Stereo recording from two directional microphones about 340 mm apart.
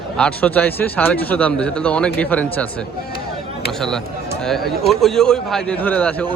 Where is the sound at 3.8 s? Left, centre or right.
Centre.